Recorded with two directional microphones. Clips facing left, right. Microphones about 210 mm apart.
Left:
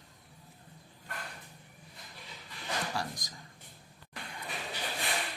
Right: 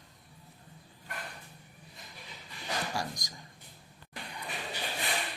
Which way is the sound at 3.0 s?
15° right (ahead or behind).